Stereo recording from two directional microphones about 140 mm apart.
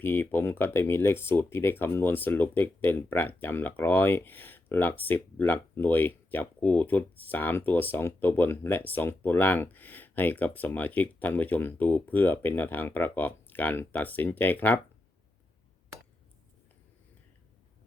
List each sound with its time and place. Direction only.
0.0 s speech: 15° left (ahead or behind)